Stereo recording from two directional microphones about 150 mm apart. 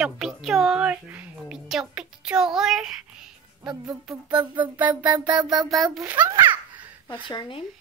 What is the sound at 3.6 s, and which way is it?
Speech, 25° right (ahead or behind).